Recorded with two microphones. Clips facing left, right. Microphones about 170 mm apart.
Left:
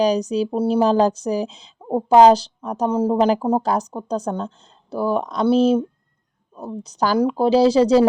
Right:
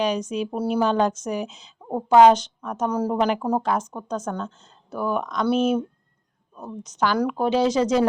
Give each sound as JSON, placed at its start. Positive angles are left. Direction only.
{"t": 0.0, "sound": "a woman's voice", "side_deg": 35}